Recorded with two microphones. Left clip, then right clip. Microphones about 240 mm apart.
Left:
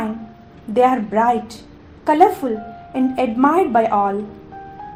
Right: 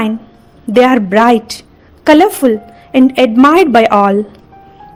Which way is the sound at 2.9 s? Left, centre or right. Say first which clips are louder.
Right 11 dB; right.